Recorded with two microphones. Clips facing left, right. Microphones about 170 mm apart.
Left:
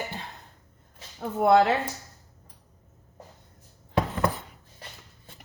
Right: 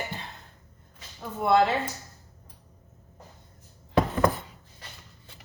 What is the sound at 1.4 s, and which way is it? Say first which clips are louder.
Speech: left 3 dB; 60° left (ahead or behind).